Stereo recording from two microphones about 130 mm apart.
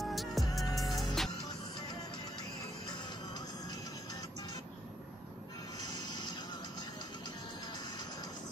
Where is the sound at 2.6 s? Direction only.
35° left (ahead or behind).